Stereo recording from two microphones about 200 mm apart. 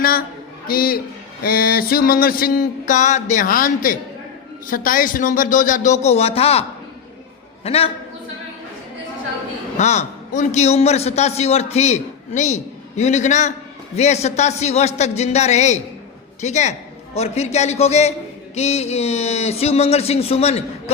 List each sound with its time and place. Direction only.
0.0 s a sound: 45° left (ahead or behind)
4.7 s a man's voice: 45° left (ahead or behind)
9.7 s a man's voice: 35° left (ahead or behind)